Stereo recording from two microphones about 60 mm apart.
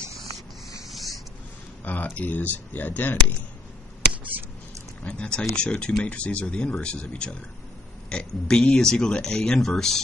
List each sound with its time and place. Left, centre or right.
0.8 s a sound: centre
1.9 s speech: left
5.0 s speech: centre